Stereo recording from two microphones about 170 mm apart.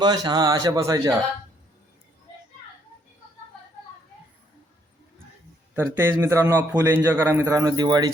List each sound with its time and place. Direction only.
0.0 s speech: 25° right (ahead or behind)
5.7 s a man's voice: 15° right (ahead or behind)